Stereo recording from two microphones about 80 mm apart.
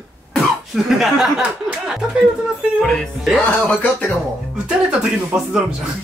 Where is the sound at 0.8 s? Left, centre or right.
Centre.